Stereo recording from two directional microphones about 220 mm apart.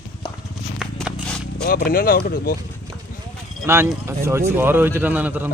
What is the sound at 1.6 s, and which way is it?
Speech, 40° left (ahead or behind).